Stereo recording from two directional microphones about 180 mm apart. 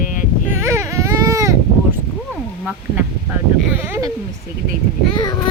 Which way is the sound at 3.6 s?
10° right (ahead or behind).